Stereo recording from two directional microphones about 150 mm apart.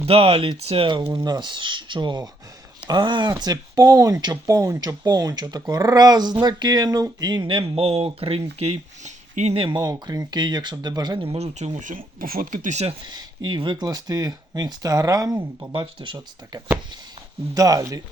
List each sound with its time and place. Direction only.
0.0 s speech: 40° right (ahead or behind)
9.6 s speech: 30° right (ahead or behind); by 12.9 s 50° right (ahead or behind)
13.1 s speech: 30° right (ahead or behind)
15.7 s speech: 35° right (ahead or behind)